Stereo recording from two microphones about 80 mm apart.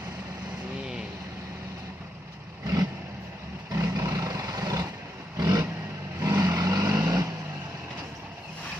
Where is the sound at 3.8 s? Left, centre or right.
Right.